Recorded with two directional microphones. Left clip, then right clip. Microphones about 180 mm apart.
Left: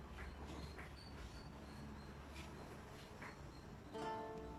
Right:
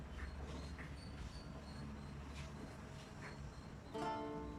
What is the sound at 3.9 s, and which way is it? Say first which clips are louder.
Music: right 3 dB; centre (ahead or behind).